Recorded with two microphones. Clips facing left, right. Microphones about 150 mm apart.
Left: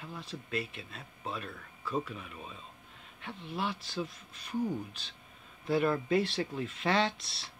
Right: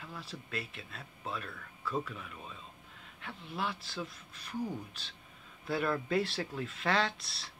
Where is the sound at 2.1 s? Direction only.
10° left (ahead or behind).